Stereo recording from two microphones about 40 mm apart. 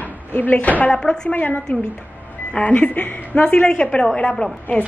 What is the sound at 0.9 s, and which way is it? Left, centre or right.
Speech, centre.